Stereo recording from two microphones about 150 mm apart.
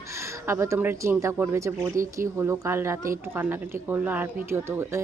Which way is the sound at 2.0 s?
60° right (ahead or behind).